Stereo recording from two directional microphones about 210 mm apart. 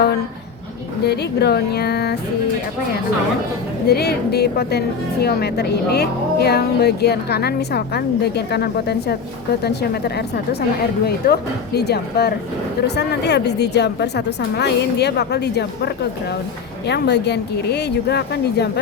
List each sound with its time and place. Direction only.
1.0 s speech: 50° left (ahead or behind)
3.8 s speech: 50° left (ahead or behind)